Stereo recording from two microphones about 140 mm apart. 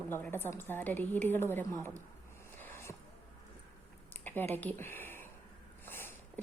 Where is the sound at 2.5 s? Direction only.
15° left (ahead or behind).